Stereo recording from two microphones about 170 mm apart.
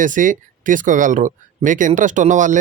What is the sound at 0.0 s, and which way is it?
Speech, 50° right (ahead or behind).